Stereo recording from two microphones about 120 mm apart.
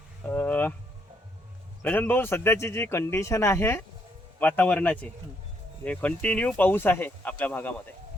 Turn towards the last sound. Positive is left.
turn(degrees=15)  # may be behind; listen again after turning